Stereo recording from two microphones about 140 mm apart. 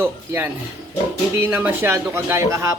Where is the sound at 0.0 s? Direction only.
15° right (ahead or behind).